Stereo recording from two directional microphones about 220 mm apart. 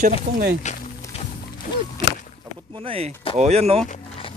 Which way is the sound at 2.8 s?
25° right (ahead or behind).